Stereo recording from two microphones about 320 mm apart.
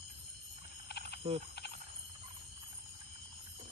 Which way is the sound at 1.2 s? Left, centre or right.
Centre.